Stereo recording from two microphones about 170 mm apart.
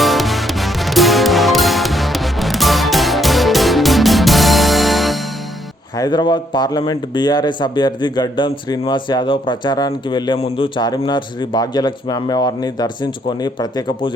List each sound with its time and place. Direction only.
0.0 s music: centre (ahead or behind)
6.0 s speech: 25° left (ahead or behind)